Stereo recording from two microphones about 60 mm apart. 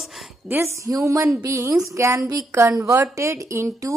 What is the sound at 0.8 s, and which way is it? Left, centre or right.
Speech, right.